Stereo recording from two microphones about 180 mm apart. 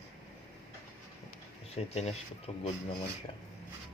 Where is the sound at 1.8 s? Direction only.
35° left (ahead or behind).